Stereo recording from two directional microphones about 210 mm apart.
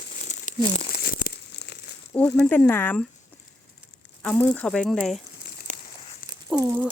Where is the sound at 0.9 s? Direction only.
40° left (ahead or behind).